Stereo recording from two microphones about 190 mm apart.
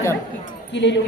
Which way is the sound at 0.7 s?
70° left (ahead or behind).